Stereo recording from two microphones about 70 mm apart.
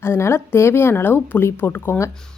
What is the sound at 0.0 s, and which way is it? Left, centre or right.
Speech, left.